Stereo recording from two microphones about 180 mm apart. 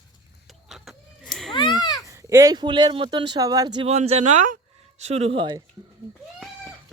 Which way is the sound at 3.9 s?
35° right (ahead or behind).